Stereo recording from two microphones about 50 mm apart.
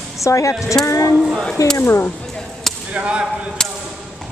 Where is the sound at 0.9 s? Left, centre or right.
Left.